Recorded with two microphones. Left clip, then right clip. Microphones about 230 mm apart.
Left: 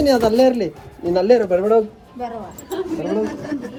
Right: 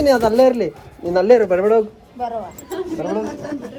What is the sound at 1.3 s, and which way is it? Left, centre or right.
Speech, centre.